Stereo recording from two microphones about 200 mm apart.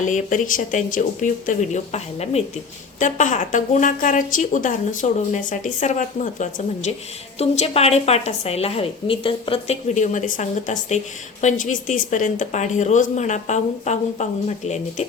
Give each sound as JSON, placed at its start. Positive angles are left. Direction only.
{"t": 0.0, "sound": "a woman's voice", "side_deg": 40}